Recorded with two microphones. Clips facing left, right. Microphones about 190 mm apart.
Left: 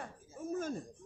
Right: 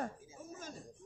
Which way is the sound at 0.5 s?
55° left (ahead or behind).